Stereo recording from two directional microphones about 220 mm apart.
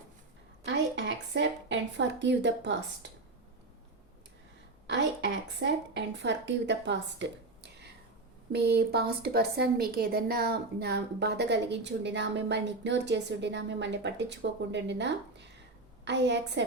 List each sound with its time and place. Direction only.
0.6 s a woman's voice: 50° right (ahead or behind)
4.9 s a woman's voice: 55° right (ahead or behind)